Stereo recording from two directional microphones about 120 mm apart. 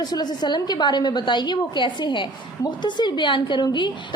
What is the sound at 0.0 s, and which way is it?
A woman's voice, 35° left (ahead or behind).